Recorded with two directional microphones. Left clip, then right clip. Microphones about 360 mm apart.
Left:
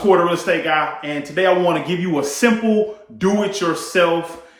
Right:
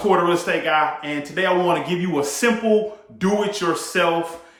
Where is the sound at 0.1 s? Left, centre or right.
Centre.